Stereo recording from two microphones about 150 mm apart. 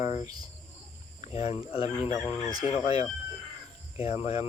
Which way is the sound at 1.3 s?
45° left (ahead or behind).